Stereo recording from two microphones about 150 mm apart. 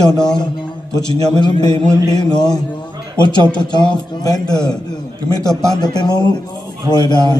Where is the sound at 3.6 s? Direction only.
30° left (ahead or behind).